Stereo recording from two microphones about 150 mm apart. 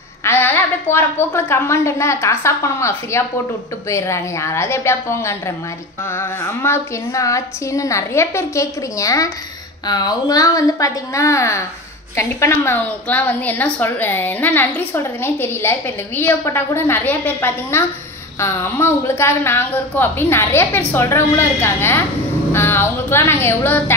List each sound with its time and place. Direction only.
0.2 s a woman's voice: 15° left (ahead or behind)